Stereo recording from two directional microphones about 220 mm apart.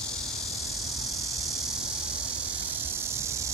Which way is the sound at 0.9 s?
Centre (ahead or behind).